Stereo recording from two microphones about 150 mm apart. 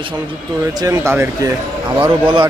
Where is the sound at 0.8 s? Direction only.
20° right (ahead or behind).